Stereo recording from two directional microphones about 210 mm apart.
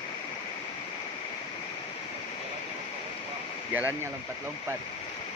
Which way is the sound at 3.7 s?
10° right (ahead or behind).